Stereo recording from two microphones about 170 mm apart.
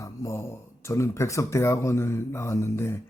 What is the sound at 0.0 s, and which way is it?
Speech, 20° left (ahead or behind).